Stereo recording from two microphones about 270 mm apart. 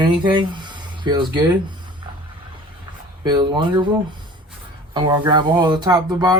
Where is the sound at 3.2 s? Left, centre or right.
Centre.